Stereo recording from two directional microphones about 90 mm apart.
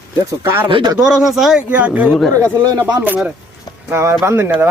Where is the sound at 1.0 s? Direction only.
5° right (ahead or behind).